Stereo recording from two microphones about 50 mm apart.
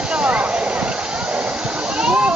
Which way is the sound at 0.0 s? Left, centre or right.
Right.